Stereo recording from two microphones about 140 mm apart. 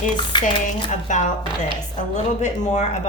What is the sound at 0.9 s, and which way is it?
Speech, 65° left (ahead or behind).